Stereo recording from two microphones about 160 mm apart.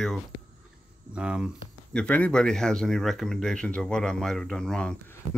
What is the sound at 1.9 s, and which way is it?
Speech, 10° left (ahead or behind).